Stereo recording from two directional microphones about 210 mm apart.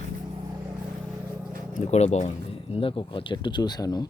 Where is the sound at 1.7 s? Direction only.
30° left (ahead or behind).